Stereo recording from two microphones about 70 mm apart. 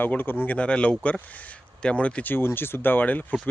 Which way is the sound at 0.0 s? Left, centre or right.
Left.